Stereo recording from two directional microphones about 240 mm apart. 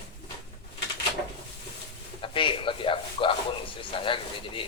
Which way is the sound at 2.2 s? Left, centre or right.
Left.